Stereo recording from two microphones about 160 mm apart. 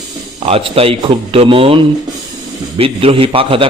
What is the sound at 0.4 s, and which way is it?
A man's voice, 35° right (ahead or behind).